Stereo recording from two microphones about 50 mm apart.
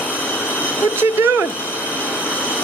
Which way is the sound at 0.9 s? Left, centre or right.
Right.